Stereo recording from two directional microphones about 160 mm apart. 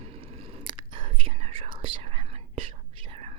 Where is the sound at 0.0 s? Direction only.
40° right (ahead or behind).